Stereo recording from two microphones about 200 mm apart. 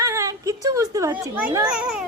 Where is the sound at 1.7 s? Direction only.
5° right (ahead or behind).